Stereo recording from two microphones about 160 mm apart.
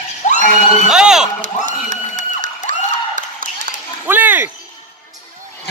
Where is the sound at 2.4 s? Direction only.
55° right (ahead or behind).